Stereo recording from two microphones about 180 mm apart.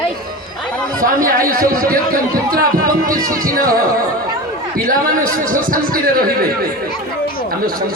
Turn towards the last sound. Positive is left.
turn(degrees=-55)  # may be behind; listen again after turning